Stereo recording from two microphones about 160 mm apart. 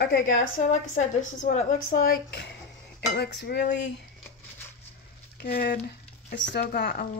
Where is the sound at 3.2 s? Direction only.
90° left.